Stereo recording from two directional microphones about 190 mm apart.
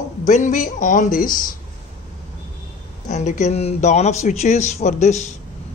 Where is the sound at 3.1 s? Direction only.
40° left (ahead or behind).